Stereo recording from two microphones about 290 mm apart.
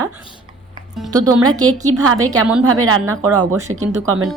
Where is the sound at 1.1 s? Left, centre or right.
Centre.